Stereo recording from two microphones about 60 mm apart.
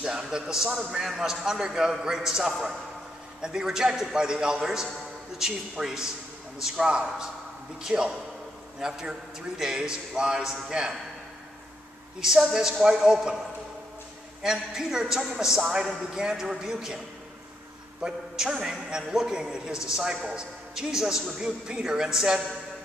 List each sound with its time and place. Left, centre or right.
0.0 s a man's voice: centre
12.2 s a man's voice: centre
14.4 s a man's voice: centre
18.0 s a man's voice: centre